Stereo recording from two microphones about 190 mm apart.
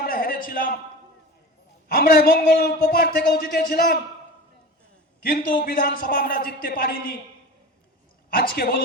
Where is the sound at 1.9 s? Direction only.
50° left (ahead or behind).